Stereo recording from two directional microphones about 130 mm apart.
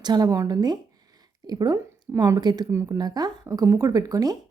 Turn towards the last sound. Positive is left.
turn(degrees=-30)  # may be behind; listen again after turning